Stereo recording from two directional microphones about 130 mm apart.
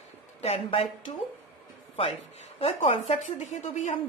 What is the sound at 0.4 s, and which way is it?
Speech, 55° left (ahead or behind).